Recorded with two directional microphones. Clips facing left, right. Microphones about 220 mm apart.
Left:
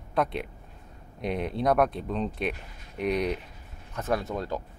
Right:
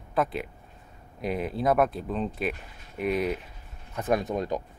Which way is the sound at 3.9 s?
15° right (ahead or behind).